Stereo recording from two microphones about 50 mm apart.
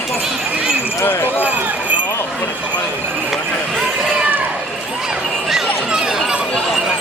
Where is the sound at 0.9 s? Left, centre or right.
Left.